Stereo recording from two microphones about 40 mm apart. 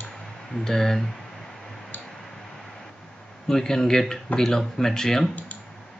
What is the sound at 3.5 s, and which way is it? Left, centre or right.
Speech, centre.